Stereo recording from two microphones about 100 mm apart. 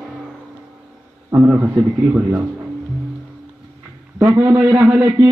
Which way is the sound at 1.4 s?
20° right (ahead or behind).